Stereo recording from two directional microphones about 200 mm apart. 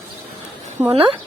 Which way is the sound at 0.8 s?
15° right (ahead or behind).